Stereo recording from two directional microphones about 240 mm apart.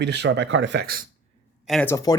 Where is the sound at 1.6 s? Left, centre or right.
Centre.